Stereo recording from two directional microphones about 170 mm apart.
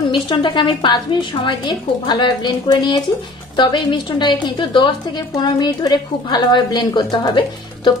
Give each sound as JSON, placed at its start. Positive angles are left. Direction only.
{"t": 0.1, "sound": "a woman's voice", "side_deg": 30}